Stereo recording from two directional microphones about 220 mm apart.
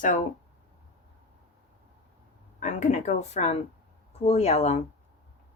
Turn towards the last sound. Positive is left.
turn(degrees=30)  # may be behind; listen again after turning